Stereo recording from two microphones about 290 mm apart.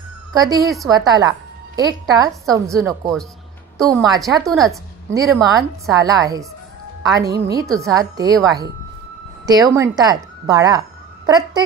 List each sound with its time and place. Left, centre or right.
0.3 s a woman's voice: centre
4.5 s a woman's voice: centre
5.1 s a woman's voice: centre
7.2 s a woman's voice: right
7.6 s a woman's voice: centre
7.9 s a woman's voice: centre
9.5 s a woman's voice: centre